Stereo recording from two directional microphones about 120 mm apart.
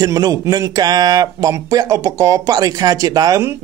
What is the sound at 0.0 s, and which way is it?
Speech, 30° right (ahead or behind).